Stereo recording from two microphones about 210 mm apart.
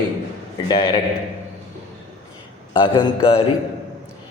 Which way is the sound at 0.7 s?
25° left (ahead or behind).